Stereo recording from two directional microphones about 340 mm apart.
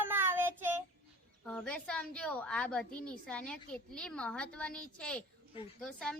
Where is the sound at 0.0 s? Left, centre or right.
Centre.